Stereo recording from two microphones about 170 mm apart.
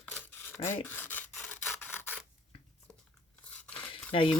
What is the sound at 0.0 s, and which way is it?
Rub, 10° left (ahead or behind).